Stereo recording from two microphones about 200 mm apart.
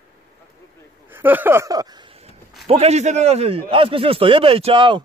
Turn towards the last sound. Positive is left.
turn(degrees=-25)  # may be behind; listen again after turning